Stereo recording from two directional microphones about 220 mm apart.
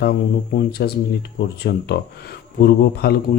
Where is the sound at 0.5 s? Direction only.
45° left (ahead or behind).